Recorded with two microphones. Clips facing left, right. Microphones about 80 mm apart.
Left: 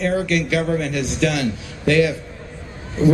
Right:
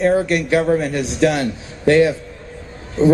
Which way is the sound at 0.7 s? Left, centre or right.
Right.